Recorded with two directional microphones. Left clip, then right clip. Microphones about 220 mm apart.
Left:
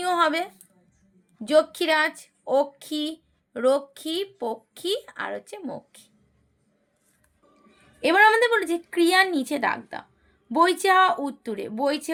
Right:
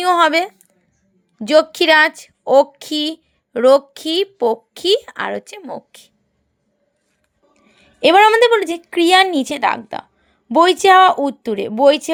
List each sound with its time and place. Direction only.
0.0 s a woman's voice: 40° right (ahead or behind)
8.0 s a woman's voice: 35° right (ahead or behind)